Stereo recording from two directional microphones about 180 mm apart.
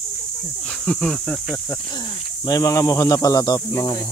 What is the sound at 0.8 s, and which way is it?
Speech, centre (ahead or behind).